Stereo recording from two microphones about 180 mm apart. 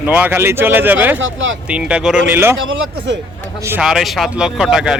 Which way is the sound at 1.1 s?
90° right.